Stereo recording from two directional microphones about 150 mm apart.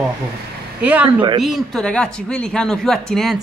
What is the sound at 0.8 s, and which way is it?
A woman's voice, 10° right (ahead or behind).